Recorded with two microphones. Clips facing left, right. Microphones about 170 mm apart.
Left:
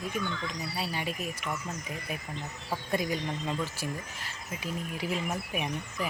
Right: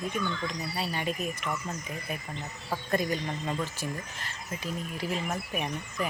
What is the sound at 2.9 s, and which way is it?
Speech, 10° left (ahead or behind).